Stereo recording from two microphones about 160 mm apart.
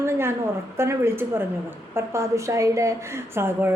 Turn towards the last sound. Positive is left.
turn(degrees=-15)  # may be behind; listen again after turning